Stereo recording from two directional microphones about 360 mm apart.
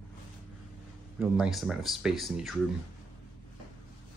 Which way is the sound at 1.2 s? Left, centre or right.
Centre.